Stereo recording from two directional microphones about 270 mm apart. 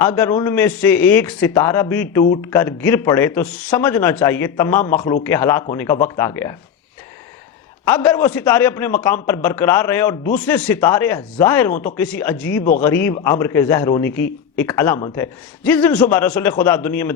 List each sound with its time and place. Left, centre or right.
0.0 s a man's voice: centre
7.9 s a man's voice: centre